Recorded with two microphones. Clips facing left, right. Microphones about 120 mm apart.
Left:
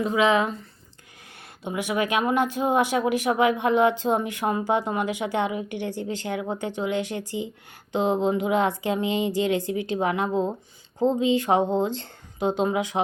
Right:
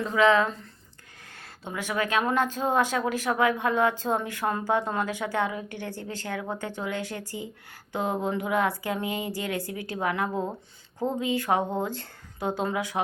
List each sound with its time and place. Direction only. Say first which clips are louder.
0.0 s speech: left 1 dB; 15° left (ahead or behind)